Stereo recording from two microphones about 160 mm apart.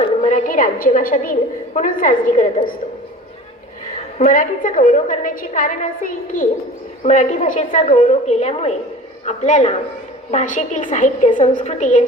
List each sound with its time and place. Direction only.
0.2 s a woman's voice: 50° left (ahead or behind)
4.3 s a woman's voice: 55° left (ahead or behind)